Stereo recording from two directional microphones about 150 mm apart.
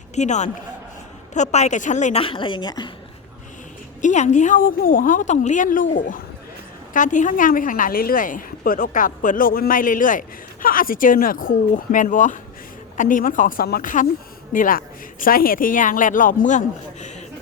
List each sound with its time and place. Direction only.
0.2 s a woman's voice: 50° left (ahead or behind)
2.2 s a woman's voice: 35° left (ahead or behind)
4.0 s a woman's voice: 55° left (ahead or behind)